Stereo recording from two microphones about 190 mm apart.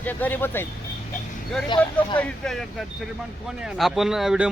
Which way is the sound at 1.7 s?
25° left (ahead or behind).